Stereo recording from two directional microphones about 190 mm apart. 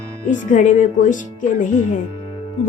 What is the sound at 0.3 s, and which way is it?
Speech, 40° left (ahead or behind).